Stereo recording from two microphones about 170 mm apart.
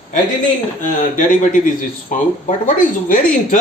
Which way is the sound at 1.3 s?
50° left (ahead or behind).